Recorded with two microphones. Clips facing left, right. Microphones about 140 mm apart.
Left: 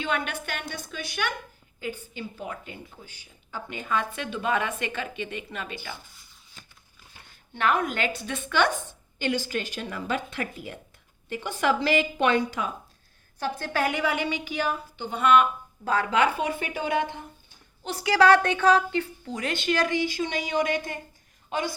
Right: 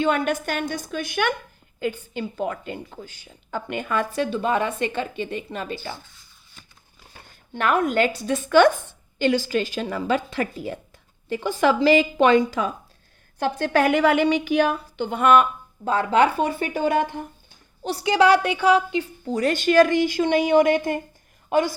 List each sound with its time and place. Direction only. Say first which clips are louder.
0.0 s a woman's voice: right 8 dB; 40° right (ahead or behind)
1.8 s a woman's voice: right 7 dB; 90° right; by 3.9 s 65° right (ahead or behind)
3.9 s a woman's voice: right 5 dB; 40° right (ahead or behind)
7.1 s speech: right 8 dB; 45° right (ahead or behind)
9.1 s a woman's voice: right 7 dB; 90° right
13.4 s a woman's voice: right 7 dB; 70° right (ahead or behind); by 15.4 s 45° right (ahead or behind)
15.8 s a woman's voice: right 4 dB; 25° right (ahead or behind); by 17.2 s 45° right (ahead or behind)
17.8 s a woman's voice: right 2 dB; 25° right (ahead or behind)
19.2 s a woman's voice: right 8 dB; 35° right (ahead or behind); by 21.0 s 55° right (ahead or behind)